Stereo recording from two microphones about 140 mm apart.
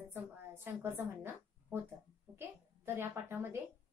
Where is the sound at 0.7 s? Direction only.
15° right (ahead or behind).